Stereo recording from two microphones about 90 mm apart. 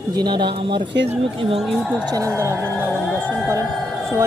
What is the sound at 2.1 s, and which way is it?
Speech, 40° right (ahead or behind).